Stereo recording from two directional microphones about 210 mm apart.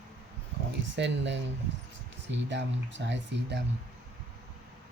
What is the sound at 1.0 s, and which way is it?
Speech, 55° right (ahead or behind).